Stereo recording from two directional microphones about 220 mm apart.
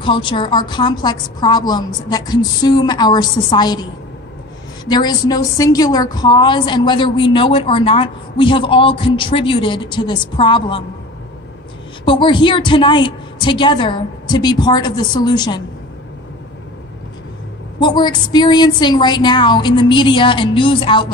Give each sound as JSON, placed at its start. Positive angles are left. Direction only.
{"t": 0.0, "sound": "a woman's voice", "side_deg": 20}
{"t": 4.8, "sound": "a woman's voice", "side_deg": 20}
{"t": 12.0, "sound": "a woman's voice", "side_deg": 20}
{"t": 17.7, "sound": "a woman's voice", "side_deg": 20}